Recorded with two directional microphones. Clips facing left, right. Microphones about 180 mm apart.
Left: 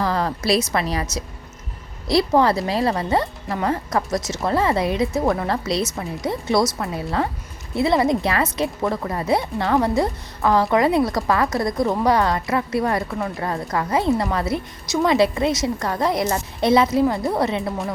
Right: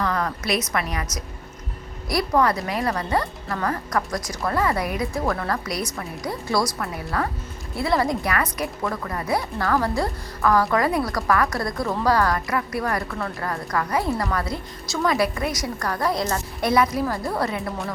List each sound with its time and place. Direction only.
0.0 s a woman's voice: 30° left (ahead or behind)